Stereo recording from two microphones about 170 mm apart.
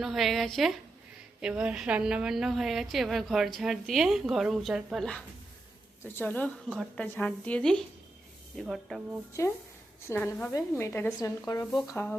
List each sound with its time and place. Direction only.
0.0 s a woman's voice: centre (ahead or behind)